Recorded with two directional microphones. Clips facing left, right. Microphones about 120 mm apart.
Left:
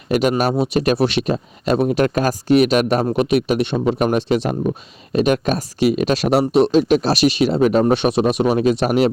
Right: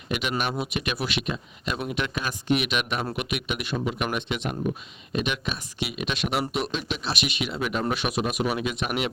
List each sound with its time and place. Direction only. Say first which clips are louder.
0.1 s speech: left 11 dB; 40° left (ahead or behind)